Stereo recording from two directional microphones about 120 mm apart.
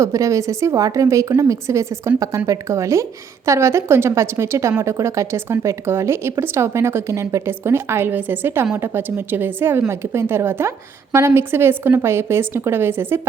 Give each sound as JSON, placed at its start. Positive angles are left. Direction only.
{"t": 0.0, "sound": "a woman's voice", "side_deg": -25}